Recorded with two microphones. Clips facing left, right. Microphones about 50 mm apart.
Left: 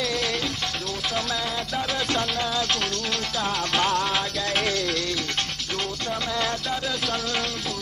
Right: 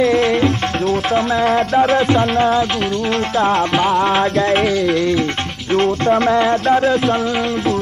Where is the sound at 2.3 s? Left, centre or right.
Right.